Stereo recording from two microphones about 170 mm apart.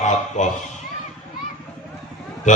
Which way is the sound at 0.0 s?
45° left (ahead or behind).